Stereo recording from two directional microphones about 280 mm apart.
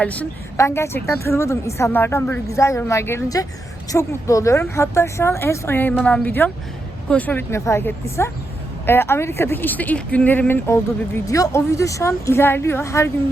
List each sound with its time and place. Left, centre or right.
0.0 s speech: centre